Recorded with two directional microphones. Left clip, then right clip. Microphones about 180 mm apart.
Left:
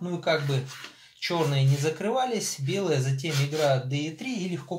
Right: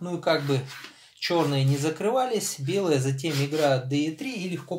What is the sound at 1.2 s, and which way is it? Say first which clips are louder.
Speech: right 2 dB; 40° right (ahead or behind).